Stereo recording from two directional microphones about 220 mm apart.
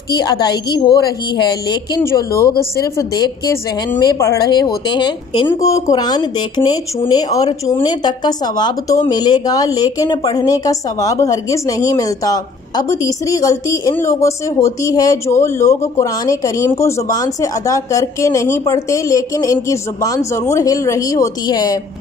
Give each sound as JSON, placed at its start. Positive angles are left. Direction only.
{"t": 0.1, "sound": "speech", "side_deg": 20}